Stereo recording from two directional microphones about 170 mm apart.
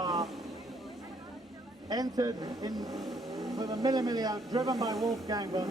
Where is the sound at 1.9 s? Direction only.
20° right (ahead or behind).